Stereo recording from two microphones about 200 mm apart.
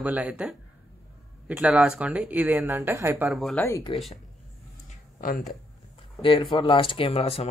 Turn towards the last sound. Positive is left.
turn(degrees=30)  # may be behind; listen again after turning